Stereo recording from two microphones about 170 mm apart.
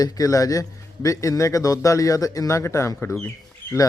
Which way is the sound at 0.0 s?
20° left (ahead or behind).